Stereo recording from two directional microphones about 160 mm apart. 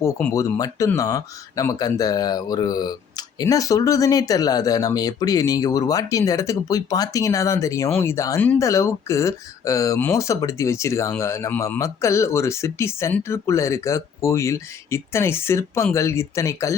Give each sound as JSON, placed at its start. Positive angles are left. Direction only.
{"t": 0.0, "sound": "speech", "side_deg": 15}